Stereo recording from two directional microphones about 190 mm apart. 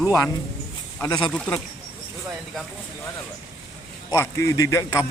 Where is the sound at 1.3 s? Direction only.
5° left (ahead or behind).